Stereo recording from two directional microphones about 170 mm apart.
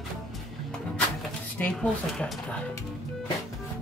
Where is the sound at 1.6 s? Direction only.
10° left (ahead or behind).